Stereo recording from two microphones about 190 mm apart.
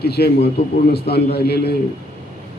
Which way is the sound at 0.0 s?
60° left (ahead or behind).